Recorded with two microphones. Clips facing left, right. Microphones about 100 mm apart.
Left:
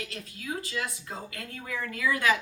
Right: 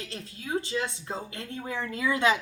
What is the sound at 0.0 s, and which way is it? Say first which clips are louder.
A woman's voice: even; 30° right (ahead or behind).